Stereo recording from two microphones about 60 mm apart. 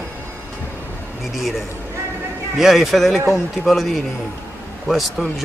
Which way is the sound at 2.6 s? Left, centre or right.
Centre.